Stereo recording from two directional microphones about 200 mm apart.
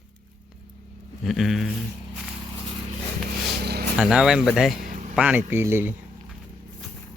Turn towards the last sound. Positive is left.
turn(degrees=-10)  # may be behind; listen again after turning